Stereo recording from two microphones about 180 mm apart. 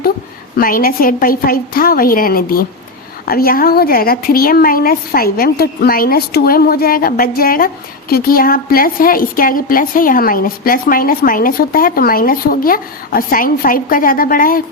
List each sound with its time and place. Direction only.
0.5 s a woman's voice: 55° left (ahead or behind)